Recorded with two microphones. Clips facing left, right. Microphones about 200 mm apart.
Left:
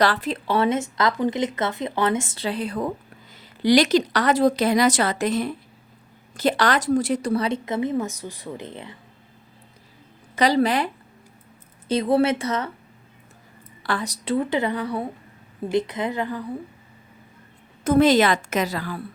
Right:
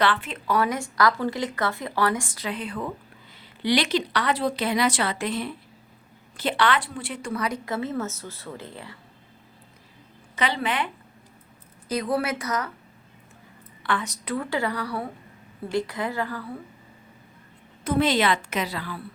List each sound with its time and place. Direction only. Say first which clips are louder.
0.0 s speech: left 3 dB; 40° left (ahead or behind); by 9.0 s 20° left (ahead or behind)
10.3 s speech: left 7 dB; 40° left (ahead or behind)
11.9 s speech: left 6 dB; 25° left (ahead or behind)
13.8 s speech: left 2 dB; 35° left (ahead or behind)
14.3 s speech: left 4 dB; 20° left (ahead or behind)
17.8 s speech: left 6 dB; 45° left (ahead or behind)